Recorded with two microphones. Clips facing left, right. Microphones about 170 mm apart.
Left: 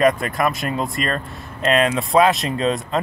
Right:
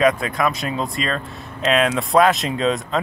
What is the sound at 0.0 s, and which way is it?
Speech, centre (ahead or behind).